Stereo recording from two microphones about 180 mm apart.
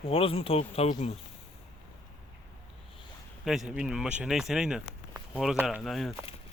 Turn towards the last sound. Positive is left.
turn(degrees=0)  # may be behind; listen again after turning